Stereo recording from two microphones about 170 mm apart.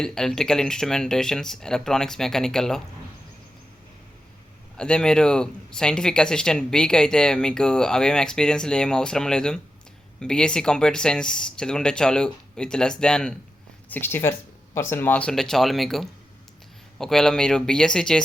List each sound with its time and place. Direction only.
0.0 s speech: 5° left (ahead or behind)
4.8 s speech: 5° left (ahead or behind)